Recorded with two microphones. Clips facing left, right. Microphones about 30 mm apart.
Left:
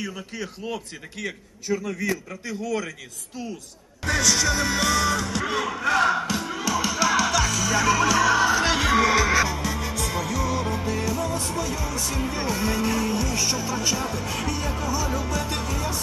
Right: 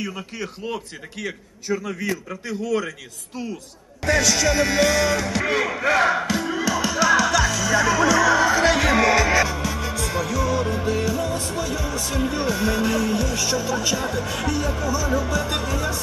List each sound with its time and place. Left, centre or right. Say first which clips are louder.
0.0 s a man's voice: right 2 dB; centre
4.0 s music: right 3 dB; centre
5.9 s speech: right 2 dB; centre
6.1 s music: right 3 dB; centre
12.5 s music: right 1 dB; centre
14.8 s speech: right 3 dB; centre
15.0 s music: right 4 dB; centre